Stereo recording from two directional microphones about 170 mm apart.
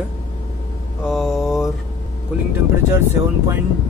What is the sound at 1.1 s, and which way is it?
Speech, centre (ahead or behind).